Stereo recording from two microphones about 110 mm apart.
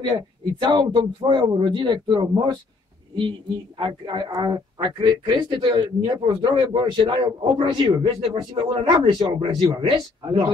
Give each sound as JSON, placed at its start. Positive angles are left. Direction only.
{"t": 0.0, "sound": "a man's voice", "side_deg": -45}
{"t": 3.7, "sound": "a man's voice", "side_deg": -45}
{"t": 9.8, "sound": "a man's voice", "side_deg": -55}